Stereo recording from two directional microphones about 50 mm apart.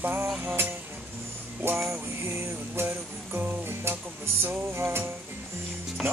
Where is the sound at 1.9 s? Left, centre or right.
Right.